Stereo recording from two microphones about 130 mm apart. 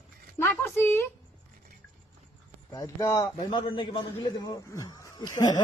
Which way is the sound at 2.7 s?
25° left (ahead or behind).